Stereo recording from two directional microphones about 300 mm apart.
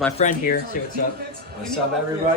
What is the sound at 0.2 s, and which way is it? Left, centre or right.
Speech, left.